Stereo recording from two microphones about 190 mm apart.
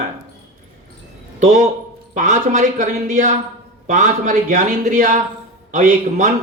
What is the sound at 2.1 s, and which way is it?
A man's voice, 40° right (ahead or behind).